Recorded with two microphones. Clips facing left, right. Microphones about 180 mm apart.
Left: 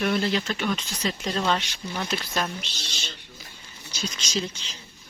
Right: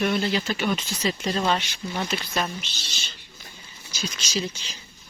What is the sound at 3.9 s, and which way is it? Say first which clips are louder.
Speech: even; 5° right (ahead or behind).